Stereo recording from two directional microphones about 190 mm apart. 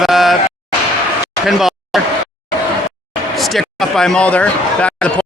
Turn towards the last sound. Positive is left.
turn(degrees=5)  # may be behind; listen again after turning